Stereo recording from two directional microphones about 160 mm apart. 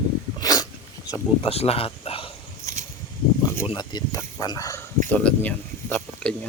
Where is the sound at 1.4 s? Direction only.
40° left (ahead or behind).